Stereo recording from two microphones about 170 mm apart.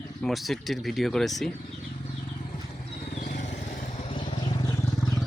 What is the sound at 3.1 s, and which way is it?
Vehicle, 50° left (ahead or behind).